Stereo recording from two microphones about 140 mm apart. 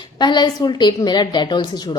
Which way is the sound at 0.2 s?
30° left (ahead or behind).